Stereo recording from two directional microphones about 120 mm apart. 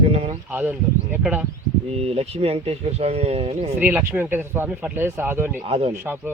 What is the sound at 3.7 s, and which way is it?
Speech, 15° right (ahead or behind).